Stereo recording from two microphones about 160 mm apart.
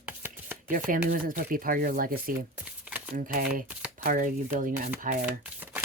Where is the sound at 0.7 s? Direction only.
60° right (ahead or behind).